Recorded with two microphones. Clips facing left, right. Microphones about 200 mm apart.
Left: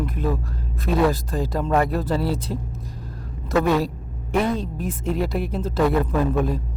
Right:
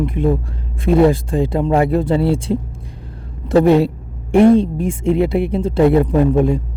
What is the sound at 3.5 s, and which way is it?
Speech, 30° right (ahead or behind).